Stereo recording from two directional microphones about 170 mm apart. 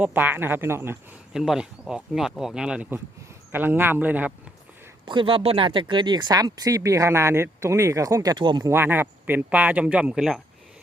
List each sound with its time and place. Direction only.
0.0 s speech: 10° right (ahead or behind)
1.3 s speech: centre (ahead or behind)
5.0 s speech: 30° right (ahead or behind); by 10.4 s centre (ahead or behind)